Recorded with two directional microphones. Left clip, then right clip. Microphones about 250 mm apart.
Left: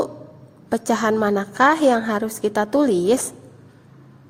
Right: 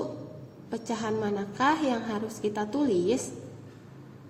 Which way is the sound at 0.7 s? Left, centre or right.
Left.